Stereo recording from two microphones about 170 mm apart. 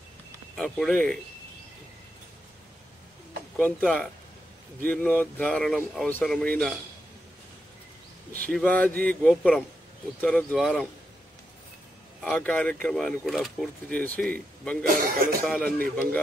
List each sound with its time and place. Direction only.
0.6 s speech: 5° left (ahead or behind)
3.5 s speech: 5° left (ahead or behind)
8.5 s speech: 5° left (ahead or behind)
12.2 s speech: 5° left (ahead or behind)
14.9 s speech: 60° right (ahead or behind)
15.4 s speech: 10° left (ahead or behind)